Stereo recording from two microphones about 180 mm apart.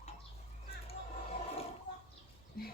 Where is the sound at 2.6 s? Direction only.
60° left (ahead or behind).